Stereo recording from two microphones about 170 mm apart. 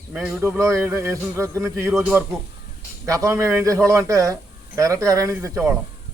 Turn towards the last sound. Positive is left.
turn(degrees=-15)  # may be behind; listen again after turning